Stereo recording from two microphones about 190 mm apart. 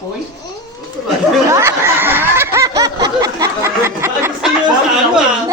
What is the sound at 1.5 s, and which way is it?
Snicker, 15° right (ahead or behind).